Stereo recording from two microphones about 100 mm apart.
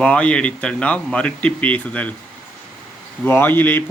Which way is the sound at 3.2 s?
20° left (ahead or behind).